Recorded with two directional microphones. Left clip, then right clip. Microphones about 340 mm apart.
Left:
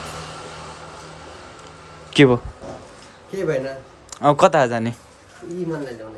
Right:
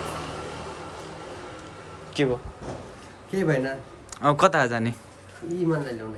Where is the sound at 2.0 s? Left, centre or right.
Left.